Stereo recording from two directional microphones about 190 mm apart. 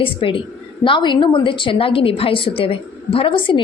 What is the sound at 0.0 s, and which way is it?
A woman's voice, 30° left (ahead or behind).